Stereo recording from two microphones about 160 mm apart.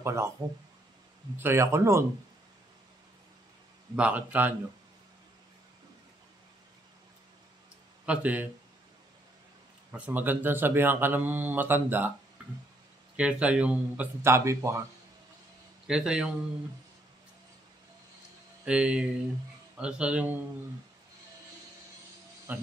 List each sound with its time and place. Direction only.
0.0 s speech: 15° right (ahead or behind)
1.4 s speech: 15° right (ahead or behind)
3.9 s speech: 10° right (ahead or behind)
8.0 s speech: 10° right (ahead or behind)
9.9 s speech: 10° right (ahead or behind)
13.1 s speech: 5° right (ahead or behind)
15.9 s a man's voice: 5° right (ahead or behind)
18.7 s speech: 5° right (ahead or behind)
22.5 s speech: 10° right (ahead or behind)